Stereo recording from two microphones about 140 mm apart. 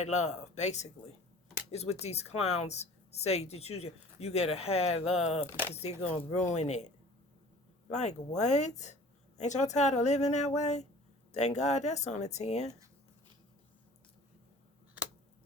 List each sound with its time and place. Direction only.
0.0 s a woman's voice: 55° left (ahead or behind)